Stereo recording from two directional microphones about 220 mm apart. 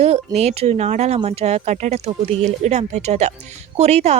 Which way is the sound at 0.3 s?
30° right (ahead or behind).